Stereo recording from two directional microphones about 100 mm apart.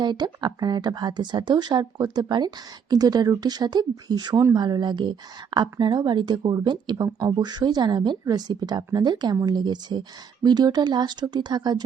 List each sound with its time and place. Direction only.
0.0 s speech: 45° right (ahead or behind)